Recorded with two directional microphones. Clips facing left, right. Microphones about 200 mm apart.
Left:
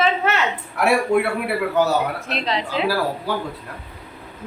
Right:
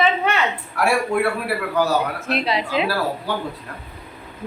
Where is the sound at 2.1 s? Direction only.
5° right (ahead or behind).